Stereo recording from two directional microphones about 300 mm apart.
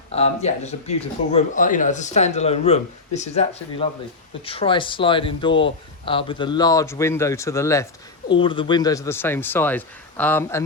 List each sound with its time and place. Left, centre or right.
0.2 s speech: left